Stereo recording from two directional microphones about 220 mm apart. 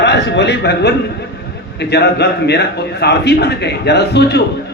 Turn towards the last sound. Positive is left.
turn(degrees=50)  # may be behind; listen again after turning